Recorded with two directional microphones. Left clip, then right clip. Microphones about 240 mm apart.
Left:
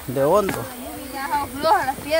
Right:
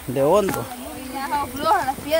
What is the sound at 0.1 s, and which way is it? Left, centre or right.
Speech, centre.